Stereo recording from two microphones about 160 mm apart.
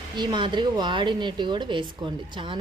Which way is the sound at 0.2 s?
30° right (ahead or behind).